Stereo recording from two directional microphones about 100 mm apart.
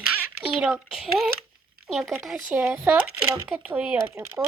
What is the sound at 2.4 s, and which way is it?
Speech, 20° right (ahead or behind).